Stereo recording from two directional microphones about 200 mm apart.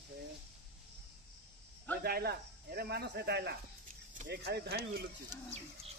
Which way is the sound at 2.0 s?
50° right (ahead or behind).